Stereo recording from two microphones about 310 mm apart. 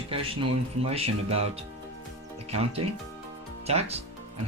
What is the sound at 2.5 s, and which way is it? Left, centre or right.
Speech, centre.